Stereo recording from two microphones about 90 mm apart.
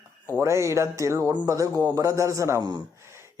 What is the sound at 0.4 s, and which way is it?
Speech, 35° right (ahead or behind).